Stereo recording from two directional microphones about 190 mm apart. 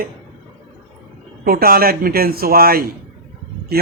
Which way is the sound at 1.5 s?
50° right (ahead or behind).